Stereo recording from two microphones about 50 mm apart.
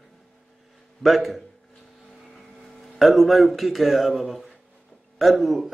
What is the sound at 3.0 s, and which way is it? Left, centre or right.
Speech, centre.